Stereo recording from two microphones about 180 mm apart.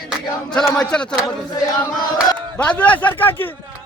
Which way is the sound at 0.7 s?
5° left (ahead or behind).